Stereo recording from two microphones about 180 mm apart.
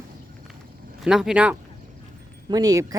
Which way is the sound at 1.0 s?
5° right (ahead or behind).